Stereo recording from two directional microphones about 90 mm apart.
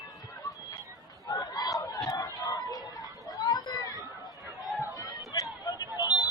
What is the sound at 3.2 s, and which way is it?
Chatter, 45° left (ahead or behind).